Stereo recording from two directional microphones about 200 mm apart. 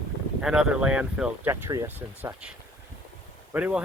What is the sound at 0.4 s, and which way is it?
Speech, 5° right (ahead or behind).